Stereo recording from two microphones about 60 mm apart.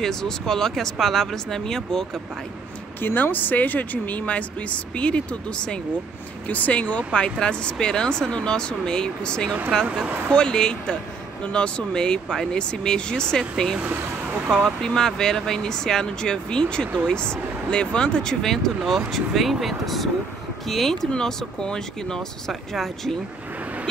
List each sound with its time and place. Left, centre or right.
0.0 s speech: centre
3.0 s speech: left; by 9.5 s centre
9.8 s speech: right
10.3 s speech: centre